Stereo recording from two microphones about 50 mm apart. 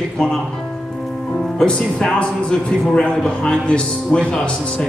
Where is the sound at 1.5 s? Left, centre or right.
Centre.